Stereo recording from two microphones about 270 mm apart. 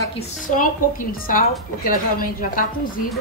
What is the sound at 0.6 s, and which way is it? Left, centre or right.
A woman's voice, left.